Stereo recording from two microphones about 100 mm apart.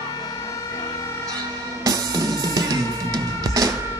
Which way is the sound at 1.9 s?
40° right (ahead or behind).